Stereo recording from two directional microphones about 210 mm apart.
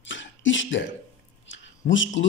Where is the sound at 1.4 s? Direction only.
60° left (ahead or behind).